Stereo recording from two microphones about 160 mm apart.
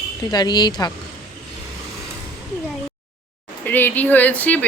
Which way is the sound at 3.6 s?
10° left (ahead or behind).